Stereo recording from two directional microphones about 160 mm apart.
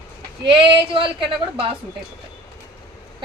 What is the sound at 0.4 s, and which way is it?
Speech, 30° right (ahead or behind).